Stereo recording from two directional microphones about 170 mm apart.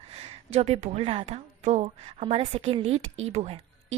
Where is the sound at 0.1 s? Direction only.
35° right (ahead or behind).